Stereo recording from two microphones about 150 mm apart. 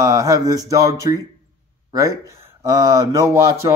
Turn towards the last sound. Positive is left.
turn(degrees=-20)  # may be behind; listen again after turning